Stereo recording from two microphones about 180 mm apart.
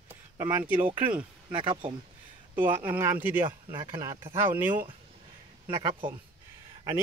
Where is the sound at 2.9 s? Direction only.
10° right (ahead or behind).